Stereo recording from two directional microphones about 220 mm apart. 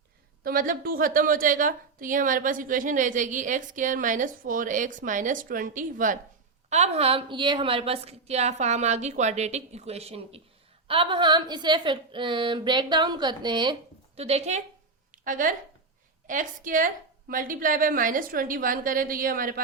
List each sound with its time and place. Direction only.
0.4 s a woman's voice: 40° right (ahead or behind)